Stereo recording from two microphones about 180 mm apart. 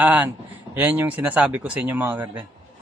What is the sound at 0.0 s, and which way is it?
Speech, 10° right (ahead or behind).